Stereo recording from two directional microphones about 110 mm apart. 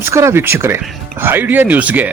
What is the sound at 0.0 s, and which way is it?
A man's voice, 25° right (ahead or behind).